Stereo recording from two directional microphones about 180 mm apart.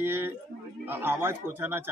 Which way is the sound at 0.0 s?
10° right (ahead or behind).